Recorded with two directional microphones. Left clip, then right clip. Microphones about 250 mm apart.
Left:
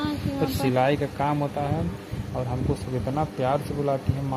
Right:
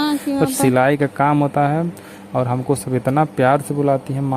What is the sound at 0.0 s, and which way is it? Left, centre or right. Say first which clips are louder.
Speech: right 9 dB; right.